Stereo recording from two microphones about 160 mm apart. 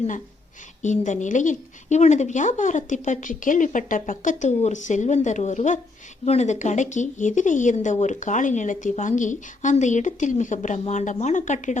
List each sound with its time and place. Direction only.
0.8 s speech: 50° left (ahead or behind)